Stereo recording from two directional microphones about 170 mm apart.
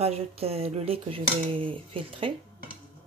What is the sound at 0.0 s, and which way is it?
Speech, 35° right (ahead or behind).